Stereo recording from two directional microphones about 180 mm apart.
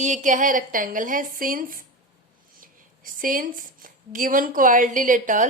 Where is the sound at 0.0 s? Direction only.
45° right (ahead or behind).